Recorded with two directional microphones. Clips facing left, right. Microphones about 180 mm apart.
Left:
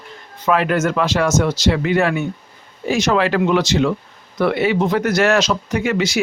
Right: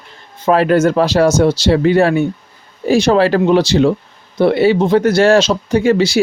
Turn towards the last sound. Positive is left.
turn(degrees=-30)  # may be behind; listen again after turning